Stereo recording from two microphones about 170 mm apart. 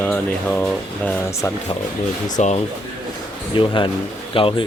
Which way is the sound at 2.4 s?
45° left (ahead or behind).